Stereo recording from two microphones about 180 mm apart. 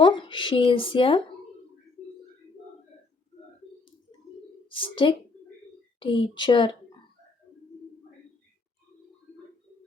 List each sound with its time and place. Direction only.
0.0 s speech: 25° left (ahead or behind)
4.8 s speech: 30° left (ahead or behind)